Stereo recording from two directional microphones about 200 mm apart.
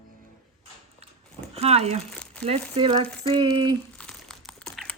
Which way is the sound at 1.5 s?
30° right (ahead or behind).